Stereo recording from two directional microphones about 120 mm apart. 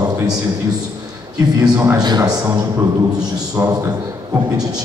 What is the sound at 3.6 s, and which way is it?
Speech, 20° right (ahead or behind).